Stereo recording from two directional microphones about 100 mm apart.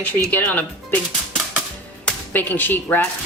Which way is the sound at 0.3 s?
15° left (ahead or behind).